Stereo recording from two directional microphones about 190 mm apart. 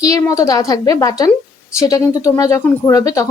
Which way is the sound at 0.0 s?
15° left (ahead or behind).